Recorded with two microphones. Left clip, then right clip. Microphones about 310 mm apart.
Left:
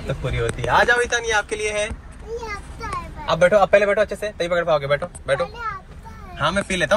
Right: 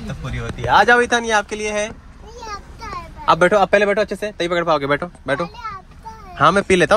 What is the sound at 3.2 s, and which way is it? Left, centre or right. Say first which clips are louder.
Speech: right 2 dB; right.